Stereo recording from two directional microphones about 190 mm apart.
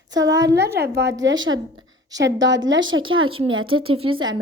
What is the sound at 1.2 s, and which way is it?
Speech, 85° right.